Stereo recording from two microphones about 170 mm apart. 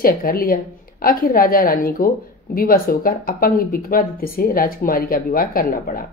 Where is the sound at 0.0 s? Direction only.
60° left (ahead or behind).